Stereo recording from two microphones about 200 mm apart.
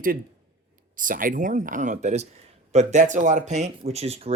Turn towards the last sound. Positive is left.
turn(degrees=-30)  # may be behind; listen again after turning